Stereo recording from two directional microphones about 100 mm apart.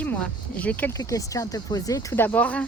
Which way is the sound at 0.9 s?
35° left (ahead or behind).